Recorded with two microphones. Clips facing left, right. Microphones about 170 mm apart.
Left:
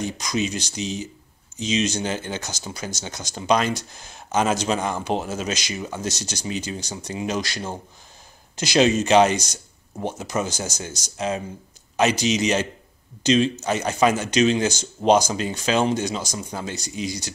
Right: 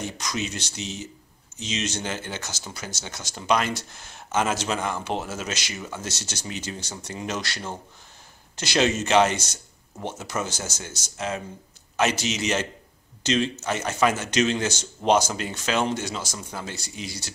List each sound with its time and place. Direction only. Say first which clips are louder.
0.0 s speech: left 5 dB; 10° left (ahead or behind)